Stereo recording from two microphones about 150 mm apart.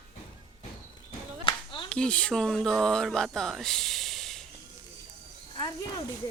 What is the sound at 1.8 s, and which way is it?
Speech, 5° left (ahead or behind).